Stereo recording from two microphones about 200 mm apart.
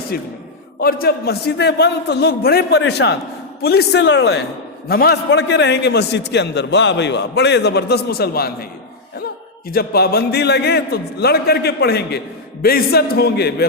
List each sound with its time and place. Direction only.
0.1 s a man's voice: 50° left (ahead or behind)
9.6 s a man's voice: 50° left (ahead or behind)